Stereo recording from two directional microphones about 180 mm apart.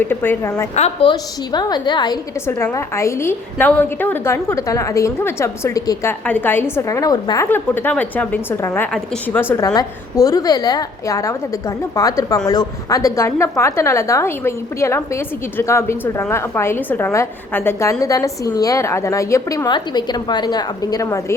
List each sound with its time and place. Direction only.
0.0 s a woman's voice: 10° left (ahead or behind)
2.5 s a woman's voice: 15° left (ahead or behind)